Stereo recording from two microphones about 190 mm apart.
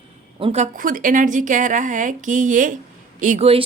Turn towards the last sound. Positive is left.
turn(degrees=-30)  # may be behind; listen again after turning